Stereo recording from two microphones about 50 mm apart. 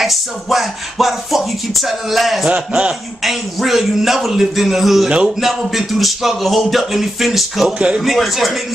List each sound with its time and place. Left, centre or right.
0.0 s speech: centre
2.4 s speech: centre
3.3 s speech: centre